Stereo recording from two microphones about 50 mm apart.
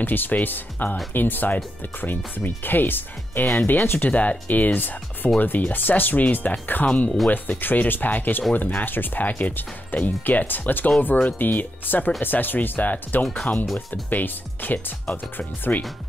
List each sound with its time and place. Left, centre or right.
0.0 s speech: left
4.1 s speech: left
6.9 s speech: left
7.2 s speech: left